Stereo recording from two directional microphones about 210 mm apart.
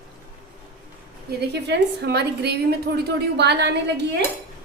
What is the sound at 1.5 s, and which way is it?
A woman's voice, 55° right (ahead or behind).